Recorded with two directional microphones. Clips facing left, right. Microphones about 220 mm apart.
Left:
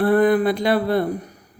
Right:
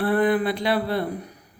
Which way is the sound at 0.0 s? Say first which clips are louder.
Left 5 dB; 45° left (ahead or behind).